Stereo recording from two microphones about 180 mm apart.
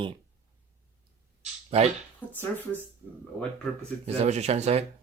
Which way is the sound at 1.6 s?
35° right (ahead or behind).